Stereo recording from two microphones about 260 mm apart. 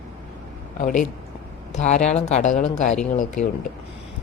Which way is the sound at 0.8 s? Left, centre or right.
Left.